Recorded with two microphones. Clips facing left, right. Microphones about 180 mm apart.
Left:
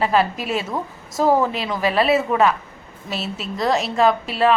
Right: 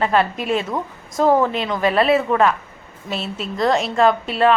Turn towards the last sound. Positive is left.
turn(degrees=0)  # may be behind; listen again after turning